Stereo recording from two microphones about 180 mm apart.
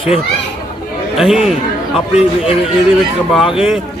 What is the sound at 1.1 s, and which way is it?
Speech, 5° right (ahead or behind).